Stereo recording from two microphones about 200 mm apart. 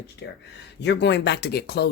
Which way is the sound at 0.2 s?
55° left (ahead or behind).